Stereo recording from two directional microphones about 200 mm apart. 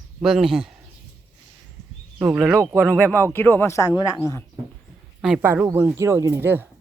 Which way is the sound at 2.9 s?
10° left (ahead or behind).